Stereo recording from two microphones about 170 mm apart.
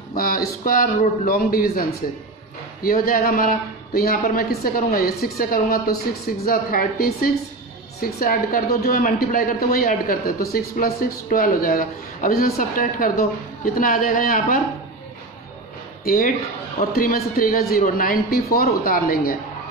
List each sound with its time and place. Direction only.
0.1 s a woman's voice: 60° left (ahead or behind)
16.0 s a woman's voice: 55° left (ahead or behind)